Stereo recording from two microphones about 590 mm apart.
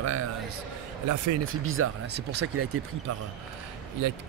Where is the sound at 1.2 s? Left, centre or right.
Right.